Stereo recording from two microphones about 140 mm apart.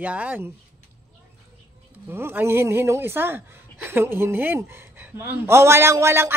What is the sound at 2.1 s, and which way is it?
Speech, 15° right (ahead or behind).